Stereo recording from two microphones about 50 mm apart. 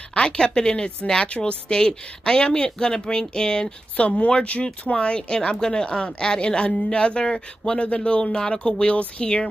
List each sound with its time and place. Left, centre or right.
0.1 s speech: centre
3.9 s a woman's voice: left